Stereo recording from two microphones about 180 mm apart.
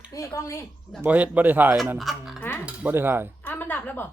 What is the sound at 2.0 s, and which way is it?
Music, centre (ahead or behind).